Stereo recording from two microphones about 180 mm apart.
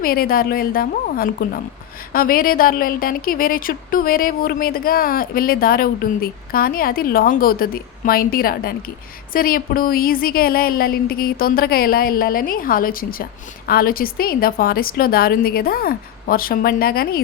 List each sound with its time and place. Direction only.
0.0 s a woman's voice: 55° left (ahead or behind)